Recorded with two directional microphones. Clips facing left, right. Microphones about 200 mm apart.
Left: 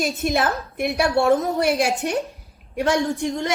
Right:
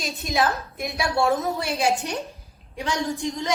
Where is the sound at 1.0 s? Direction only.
65° left (ahead or behind).